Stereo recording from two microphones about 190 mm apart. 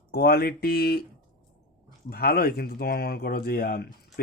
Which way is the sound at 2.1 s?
50° left (ahead or behind).